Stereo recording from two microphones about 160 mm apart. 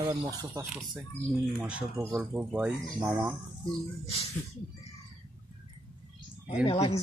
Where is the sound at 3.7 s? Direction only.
35° left (ahead or behind).